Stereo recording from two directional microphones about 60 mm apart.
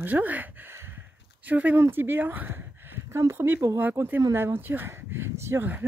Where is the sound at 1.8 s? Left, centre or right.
Right.